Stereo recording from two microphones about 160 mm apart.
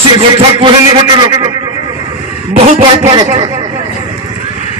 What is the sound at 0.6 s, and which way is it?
Speech, 30° right (ahead or behind).